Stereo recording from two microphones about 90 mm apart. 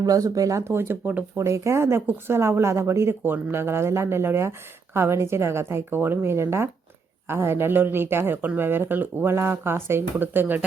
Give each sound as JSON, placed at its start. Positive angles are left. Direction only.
{"t": 0.0, "sound": "speech", "side_deg": -45}
{"t": 0.6, "sound": "speech", "side_deg": -25}